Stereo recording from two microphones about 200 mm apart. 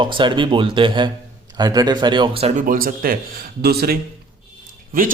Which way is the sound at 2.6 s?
45° right (ahead or behind).